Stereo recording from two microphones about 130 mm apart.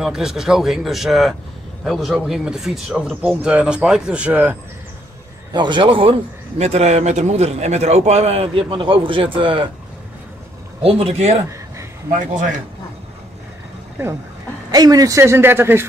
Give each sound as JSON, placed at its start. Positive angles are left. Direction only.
{"t": 0.0, "sound": "speech", "side_deg": -5}
{"t": 5.5, "sound": "a man's voice", "side_deg": -35}
{"t": 6.6, "sound": "a man's voice", "side_deg": -55}
{"t": 10.8, "sound": "a man's voice", "side_deg": -50}
{"t": 14.7, "sound": "speech", "side_deg": -30}